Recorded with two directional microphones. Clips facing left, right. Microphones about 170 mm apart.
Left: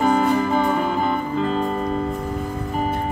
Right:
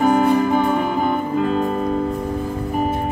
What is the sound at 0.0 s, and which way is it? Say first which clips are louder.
Music: right 3 dB; 10° right (ahead or behind).